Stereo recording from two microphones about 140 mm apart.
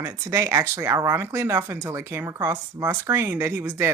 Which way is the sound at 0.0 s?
20° right (ahead or behind).